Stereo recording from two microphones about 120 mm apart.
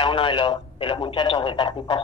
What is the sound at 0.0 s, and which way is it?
Speech, 45° left (ahead or behind).